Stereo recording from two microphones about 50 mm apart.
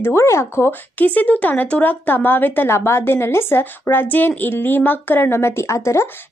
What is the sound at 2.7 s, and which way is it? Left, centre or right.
A woman's voice, left.